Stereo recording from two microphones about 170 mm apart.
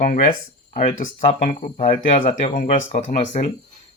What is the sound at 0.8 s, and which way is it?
Speech, 35° left (ahead or behind).